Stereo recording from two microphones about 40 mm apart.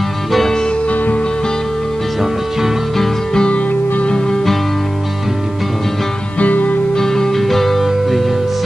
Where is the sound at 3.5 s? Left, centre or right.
Left.